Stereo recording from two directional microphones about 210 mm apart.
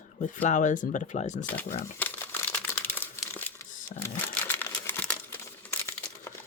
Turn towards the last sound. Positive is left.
turn(degrees=10)  # may be behind; listen again after turning